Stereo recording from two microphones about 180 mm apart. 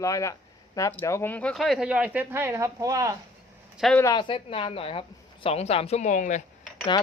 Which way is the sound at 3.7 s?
Centre (ahead or behind).